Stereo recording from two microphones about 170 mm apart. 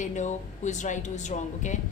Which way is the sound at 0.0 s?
45° left (ahead or behind).